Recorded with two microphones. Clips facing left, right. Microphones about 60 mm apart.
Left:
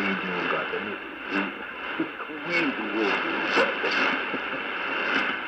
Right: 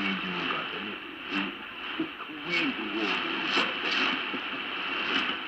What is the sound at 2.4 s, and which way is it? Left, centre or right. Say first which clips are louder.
Speech: left 4 dB; left.